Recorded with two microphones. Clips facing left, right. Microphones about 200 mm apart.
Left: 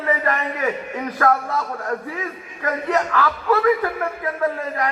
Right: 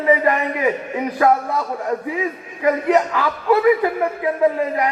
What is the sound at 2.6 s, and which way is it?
A man's voice, 15° right (ahead or behind).